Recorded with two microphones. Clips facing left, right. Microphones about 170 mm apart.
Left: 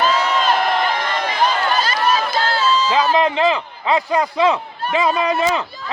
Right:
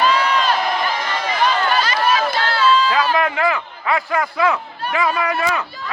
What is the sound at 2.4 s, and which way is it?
Run, 45° left (ahead or behind).